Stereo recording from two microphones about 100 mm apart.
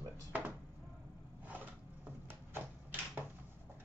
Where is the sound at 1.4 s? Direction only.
15° right (ahead or behind).